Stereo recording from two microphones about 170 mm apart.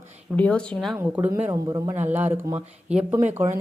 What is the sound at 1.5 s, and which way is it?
Speech, 20° right (ahead or behind).